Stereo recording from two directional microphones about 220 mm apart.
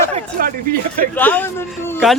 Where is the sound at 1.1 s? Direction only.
10° left (ahead or behind).